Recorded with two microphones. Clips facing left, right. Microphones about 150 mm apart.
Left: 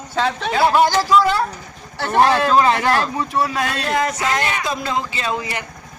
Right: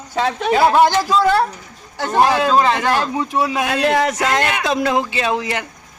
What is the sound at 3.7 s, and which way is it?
A man's voice, 80° right.